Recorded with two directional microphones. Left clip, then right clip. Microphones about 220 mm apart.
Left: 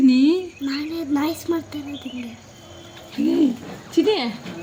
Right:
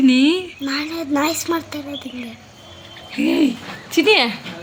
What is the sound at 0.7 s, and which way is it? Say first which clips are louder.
A woman's voice: right 3 dB; 25° right (ahead or behind).